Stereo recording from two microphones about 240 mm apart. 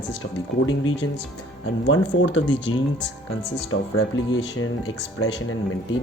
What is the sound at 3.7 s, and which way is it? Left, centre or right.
Speech, left.